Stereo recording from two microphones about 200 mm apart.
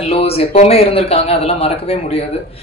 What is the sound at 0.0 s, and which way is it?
Speech, 30° left (ahead or behind).